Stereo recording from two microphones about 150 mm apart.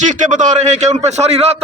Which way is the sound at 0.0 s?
55° right (ahead or behind).